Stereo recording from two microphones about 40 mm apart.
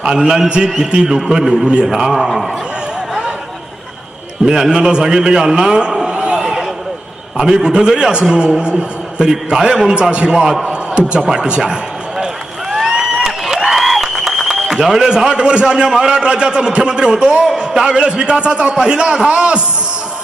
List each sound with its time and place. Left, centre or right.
0.2 s a man's voice: centre
1.9 s a man's voice: centre
4.4 s a man's voice: centre
5.9 s a sound: centre
6.4 s a sound: centre
7.3 s a man's voice: centre
9.9 s a man's voice: right
11.6 s a sound: centre
17.6 s a man's voice: right